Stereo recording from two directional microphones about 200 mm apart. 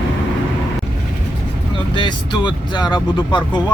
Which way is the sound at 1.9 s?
20° left (ahead or behind).